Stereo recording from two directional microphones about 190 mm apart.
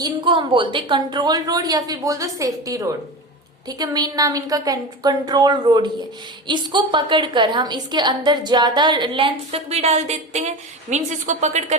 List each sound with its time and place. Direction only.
0.0 s a woman's voice: 25° right (ahead or behind)